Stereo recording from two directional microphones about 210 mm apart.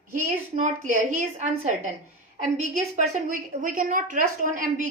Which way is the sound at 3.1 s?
40° right (ahead or behind).